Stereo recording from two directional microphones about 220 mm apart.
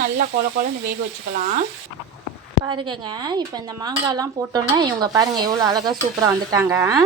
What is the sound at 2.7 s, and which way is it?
Speech, 20° right (ahead or behind).